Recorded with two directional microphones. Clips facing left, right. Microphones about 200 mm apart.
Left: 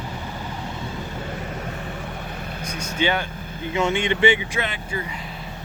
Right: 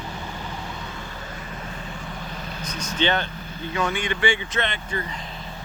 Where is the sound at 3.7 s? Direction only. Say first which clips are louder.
Left 4 dB; 25° left (ahead or behind).